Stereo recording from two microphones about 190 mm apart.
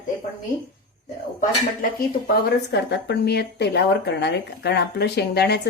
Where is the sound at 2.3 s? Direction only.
60° left (ahead or behind).